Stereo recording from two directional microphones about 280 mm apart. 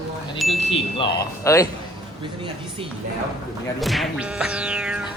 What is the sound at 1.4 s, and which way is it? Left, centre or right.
Speech, centre.